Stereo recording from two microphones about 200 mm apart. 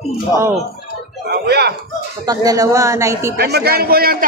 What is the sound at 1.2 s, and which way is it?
Speech, 50° right (ahead or behind).